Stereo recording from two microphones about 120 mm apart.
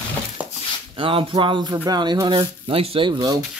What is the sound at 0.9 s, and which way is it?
Speech, 45° right (ahead or behind).